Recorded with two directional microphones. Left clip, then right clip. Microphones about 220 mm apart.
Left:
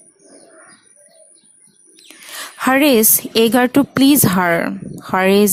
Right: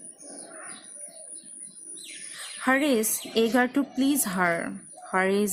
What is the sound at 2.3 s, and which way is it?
A woman's voice, 45° left (ahead or behind).